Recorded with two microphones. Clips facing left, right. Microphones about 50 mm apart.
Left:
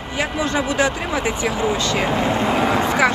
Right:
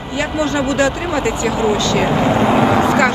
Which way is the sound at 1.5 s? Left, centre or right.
Right.